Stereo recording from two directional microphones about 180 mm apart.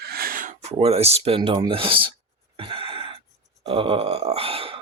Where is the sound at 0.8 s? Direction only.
35° right (ahead or behind).